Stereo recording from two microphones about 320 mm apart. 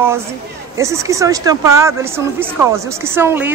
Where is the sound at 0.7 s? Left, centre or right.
Centre.